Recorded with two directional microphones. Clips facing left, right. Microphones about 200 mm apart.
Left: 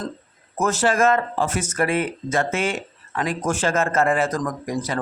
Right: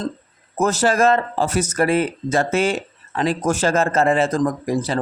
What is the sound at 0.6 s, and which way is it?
Speech, 40° right (ahead or behind).